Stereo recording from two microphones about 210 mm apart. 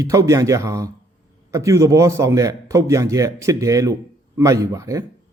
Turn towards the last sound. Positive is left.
turn(degrees=-15)  # may be behind; listen again after turning